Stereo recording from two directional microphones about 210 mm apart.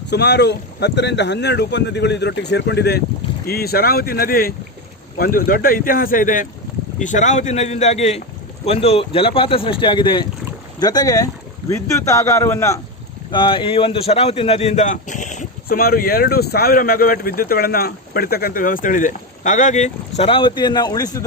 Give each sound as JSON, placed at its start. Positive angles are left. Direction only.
{"t": 0.1, "sound": "a man's voice", "side_deg": 55}